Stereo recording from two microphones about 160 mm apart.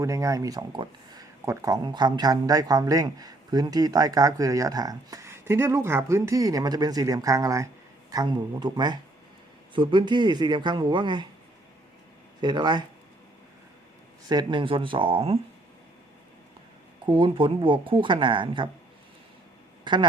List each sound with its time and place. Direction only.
0.0 s speech: 20° right (ahead or behind)
12.4 s speech: 25° right (ahead or behind)
14.3 s speech: 30° right (ahead or behind)
17.1 s speech: 30° right (ahead or behind)
19.8 s speech: 30° right (ahead or behind)